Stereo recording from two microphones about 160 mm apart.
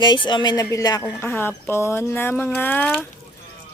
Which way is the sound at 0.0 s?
30° left (ahead or behind).